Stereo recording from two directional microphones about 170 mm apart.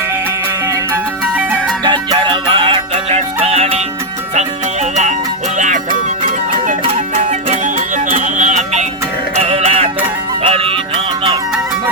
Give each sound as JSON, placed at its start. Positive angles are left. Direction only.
{"t": 1.8, "sound": "music", "side_deg": -25}